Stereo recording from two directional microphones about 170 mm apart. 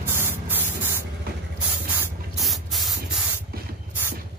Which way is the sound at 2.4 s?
Centre (ahead or behind).